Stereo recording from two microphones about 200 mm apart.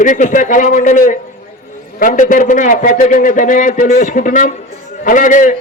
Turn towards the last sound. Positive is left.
turn(degrees=40)  # may be behind; listen again after turning